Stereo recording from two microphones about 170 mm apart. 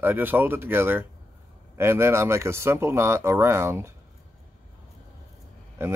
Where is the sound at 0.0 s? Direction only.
10° right (ahead or behind).